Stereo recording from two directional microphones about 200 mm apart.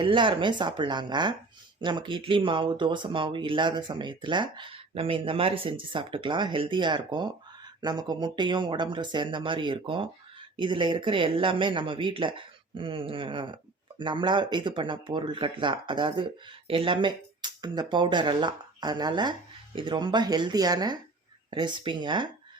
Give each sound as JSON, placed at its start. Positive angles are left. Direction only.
{"t": 0.0, "sound": "speech", "side_deg": -25}